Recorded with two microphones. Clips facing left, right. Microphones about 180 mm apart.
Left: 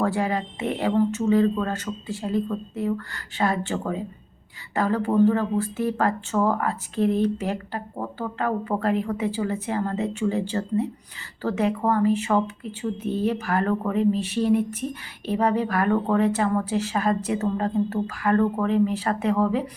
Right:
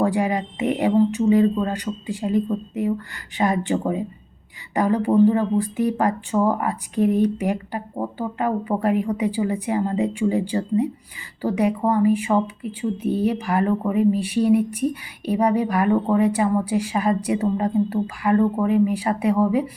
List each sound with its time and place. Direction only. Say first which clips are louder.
0.0 s speech: right 3 dB; 15° right (ahead or behind)